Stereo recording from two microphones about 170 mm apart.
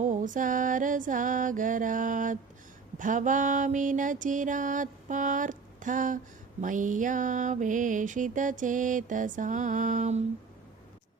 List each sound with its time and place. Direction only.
0.0 s mantra: 50° right (ahead or behind)